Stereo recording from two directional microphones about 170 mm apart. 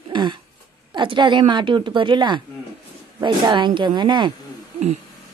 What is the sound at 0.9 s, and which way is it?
A woman's voice, 25° right (ahead or behind).